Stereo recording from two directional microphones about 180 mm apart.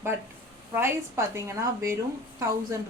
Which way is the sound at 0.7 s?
15° right (ahead or behind).